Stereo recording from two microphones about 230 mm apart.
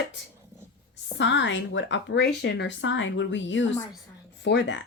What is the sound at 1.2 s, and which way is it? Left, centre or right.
Speech, left.